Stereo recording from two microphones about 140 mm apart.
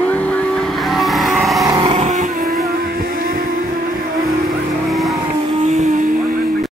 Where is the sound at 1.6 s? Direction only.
30° right (ahead or behind).